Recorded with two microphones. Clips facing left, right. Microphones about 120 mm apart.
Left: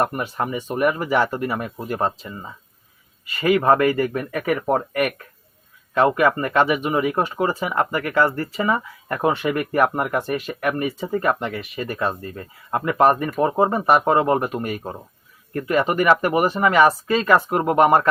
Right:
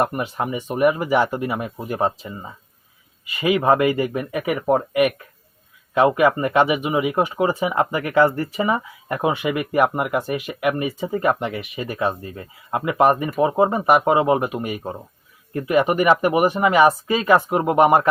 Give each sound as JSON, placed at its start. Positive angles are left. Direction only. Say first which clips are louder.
{"t": 0.0, "sound": "speech", "louder": "right 1 dB", "side_deg": -10}